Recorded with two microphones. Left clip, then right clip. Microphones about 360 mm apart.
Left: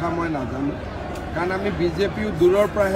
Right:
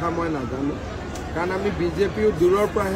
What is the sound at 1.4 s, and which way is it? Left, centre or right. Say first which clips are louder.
Speech: left 1 dB; centre.